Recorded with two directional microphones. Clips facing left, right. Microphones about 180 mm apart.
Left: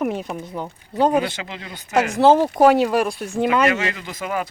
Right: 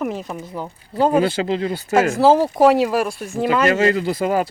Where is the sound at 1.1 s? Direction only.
30° right (ahead or behind).